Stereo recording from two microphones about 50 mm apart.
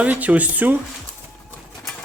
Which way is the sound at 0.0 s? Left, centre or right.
Right.